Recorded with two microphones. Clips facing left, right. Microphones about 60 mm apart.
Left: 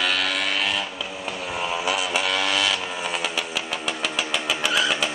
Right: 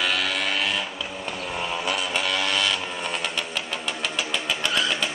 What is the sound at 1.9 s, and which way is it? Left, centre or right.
Vehicle, centre.